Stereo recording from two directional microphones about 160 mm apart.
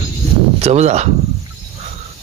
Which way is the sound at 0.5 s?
45° right (ahead or behind).